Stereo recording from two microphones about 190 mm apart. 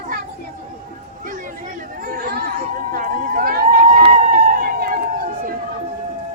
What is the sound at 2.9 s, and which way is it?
Run, 45° right (ahead or behind).